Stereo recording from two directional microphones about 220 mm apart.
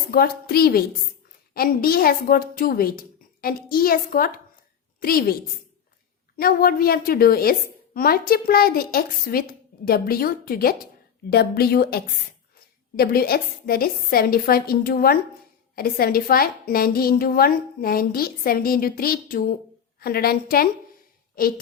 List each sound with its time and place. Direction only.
0.1 s a woman's voice: 45° left (ahead or behind)